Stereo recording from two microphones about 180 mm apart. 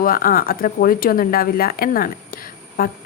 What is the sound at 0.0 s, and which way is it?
A woman's voice, 50° left (ahead or behind).